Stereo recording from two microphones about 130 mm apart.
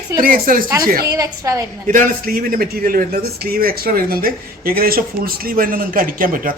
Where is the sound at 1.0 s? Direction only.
25° right (ahead or behind).